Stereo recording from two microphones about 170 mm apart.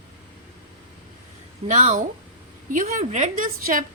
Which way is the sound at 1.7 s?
45° right (ahead or behind).